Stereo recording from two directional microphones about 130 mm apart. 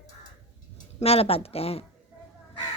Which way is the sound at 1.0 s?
50° left (ahead or behind).